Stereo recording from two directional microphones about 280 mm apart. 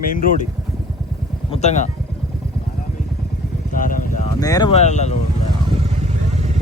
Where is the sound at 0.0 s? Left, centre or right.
Left.